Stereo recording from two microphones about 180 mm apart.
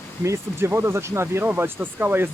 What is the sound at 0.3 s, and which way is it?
Speech, 15° right (ahead or behind).